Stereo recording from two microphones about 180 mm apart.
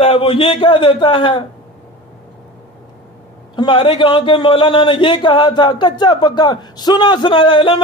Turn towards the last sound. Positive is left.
turn(degrees=25)  # may be behind; listen again after turning